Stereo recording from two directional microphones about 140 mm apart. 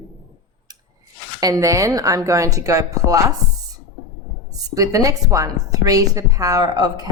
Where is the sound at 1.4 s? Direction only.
25° right (ahead or behind).